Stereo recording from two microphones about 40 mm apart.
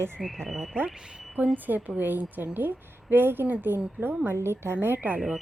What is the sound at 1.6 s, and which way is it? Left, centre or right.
Speech, right.